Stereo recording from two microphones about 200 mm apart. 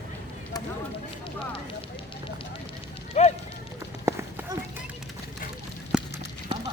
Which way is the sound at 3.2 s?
35° left (ahead or behind).